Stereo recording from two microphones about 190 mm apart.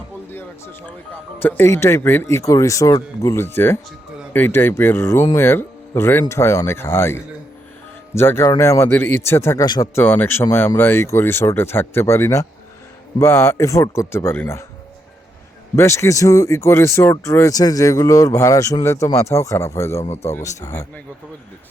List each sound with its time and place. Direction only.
0.3 s a man's voice: 10° left (ahead or behind)
15.7 s a man's voice: 15° left (ahead or behind)
20.6 s speech: 35° left (ahead or behind)